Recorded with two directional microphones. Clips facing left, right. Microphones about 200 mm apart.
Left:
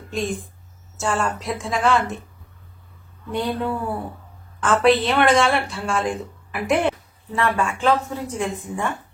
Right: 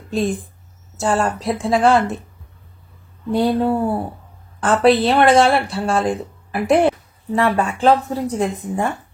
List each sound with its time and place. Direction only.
0.1 s a woman's voice: 35° right (ahead or behind)
3.3 s speech: 35° right (ahead or behind)